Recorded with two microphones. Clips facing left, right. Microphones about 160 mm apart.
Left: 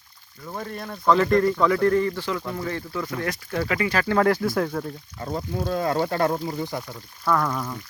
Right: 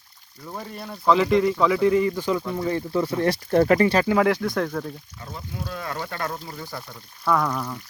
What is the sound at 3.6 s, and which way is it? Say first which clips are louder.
Speech: right 8 dB; 45° right (ahead or behind).